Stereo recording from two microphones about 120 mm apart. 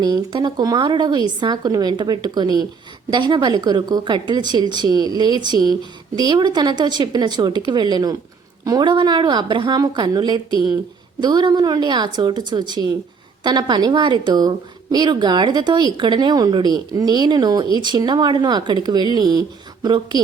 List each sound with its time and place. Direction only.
0.0 s speech: 35° right (ahead or behind)